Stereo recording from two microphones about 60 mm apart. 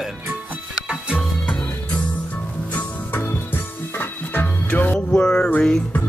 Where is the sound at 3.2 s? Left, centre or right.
Left.